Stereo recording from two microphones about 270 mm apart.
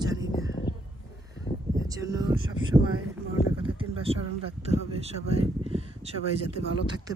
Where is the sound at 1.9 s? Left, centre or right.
Centre.